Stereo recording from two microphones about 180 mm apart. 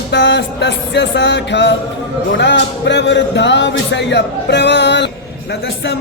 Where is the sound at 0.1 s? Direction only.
75° left (ahead or behind).